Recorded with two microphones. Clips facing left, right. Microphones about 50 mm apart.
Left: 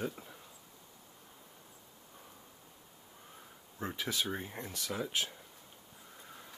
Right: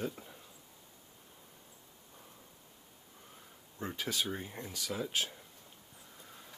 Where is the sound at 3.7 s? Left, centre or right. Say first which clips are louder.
Even; centre.